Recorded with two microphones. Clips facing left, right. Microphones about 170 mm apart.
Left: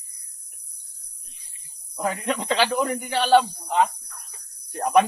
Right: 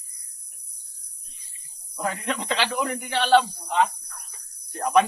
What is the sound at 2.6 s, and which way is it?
Speech, 40° left (ahead or behind).